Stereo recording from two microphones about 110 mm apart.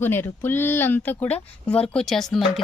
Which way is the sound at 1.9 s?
5° left (ahead or behind).